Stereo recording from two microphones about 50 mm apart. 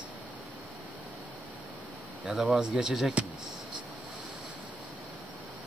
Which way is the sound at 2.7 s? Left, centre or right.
Centre.